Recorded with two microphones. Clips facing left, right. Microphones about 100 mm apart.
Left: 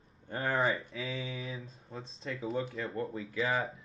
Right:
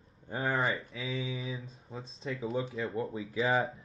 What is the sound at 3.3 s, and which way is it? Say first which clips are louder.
Speech: right 3 dB; 30° right (ahead or behind).